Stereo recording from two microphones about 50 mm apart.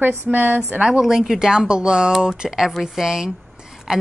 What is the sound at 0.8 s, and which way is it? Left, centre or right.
Speech, centre.